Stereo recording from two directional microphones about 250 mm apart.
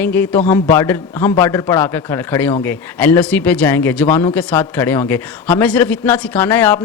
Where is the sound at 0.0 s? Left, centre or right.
Centre.